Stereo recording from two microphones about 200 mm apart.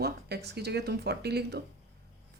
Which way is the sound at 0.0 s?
55° right (ahead or behind).